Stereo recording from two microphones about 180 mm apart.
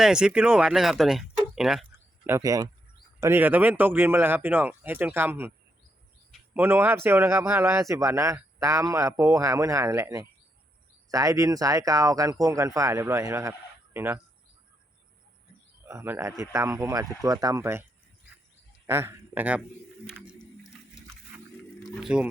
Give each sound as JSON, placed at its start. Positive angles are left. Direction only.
{"t": 0.0, "sound": "speech", "side_deg": -5}
{"t": 2.2, "sound": "speech", "side_deg": -15}
{"t": 6.5, "sound": "speech", "side_deg": -10}
{"t": 15.8, "sound": "speech", "side_deg": -15}
{"t": 18.9, "sound": "speech", "side_deg": -10}
{"t": 22.0, "sound": "speech", "side_deg": -5}